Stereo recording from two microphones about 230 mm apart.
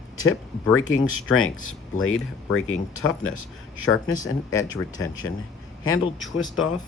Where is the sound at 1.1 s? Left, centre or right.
Left.